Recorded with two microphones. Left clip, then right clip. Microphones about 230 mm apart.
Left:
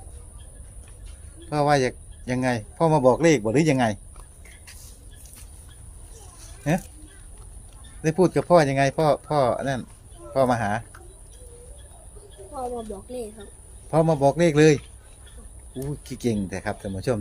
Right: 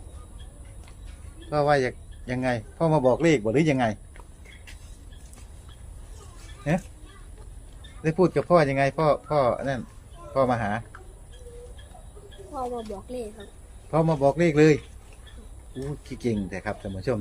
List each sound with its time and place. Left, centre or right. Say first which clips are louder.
1.5 s speech: left 1 dB; left
8.0 s speech: left 2 dB; left
12.5 s speech: even; centre
13.9 s speech: left 2 dB; left
15.8 s speech: left 2 dB; left